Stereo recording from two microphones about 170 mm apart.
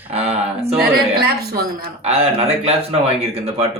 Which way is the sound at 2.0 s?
35° right (ahead or behind).